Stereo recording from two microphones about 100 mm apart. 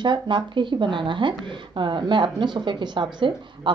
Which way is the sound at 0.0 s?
50° right (ahead or behind).